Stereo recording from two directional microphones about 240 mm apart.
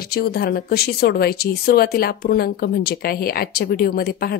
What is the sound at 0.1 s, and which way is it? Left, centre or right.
Speech, left.